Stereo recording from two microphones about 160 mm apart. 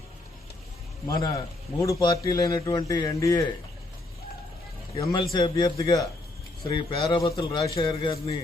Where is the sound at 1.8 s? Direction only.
25° left (ahead or behind).